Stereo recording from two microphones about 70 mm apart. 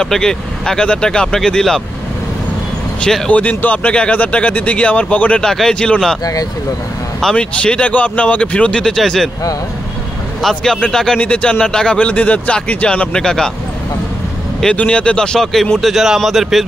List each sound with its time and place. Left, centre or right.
0.0 s speech: centre
3.0 s speech: centre
3.3 s speech: left
5.4 s speech: centre
7.2 s speech: centre
10.5 s speech: centre
14.6 s speech: centre